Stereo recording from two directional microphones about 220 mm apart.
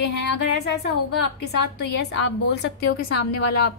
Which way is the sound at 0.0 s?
50° left (ahead or behind).